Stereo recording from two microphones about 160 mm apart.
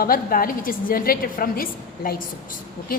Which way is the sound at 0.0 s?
65° left (ahead or behind).